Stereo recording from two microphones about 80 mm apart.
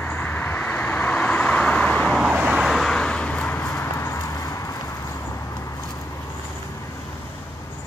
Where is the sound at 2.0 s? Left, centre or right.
Centre.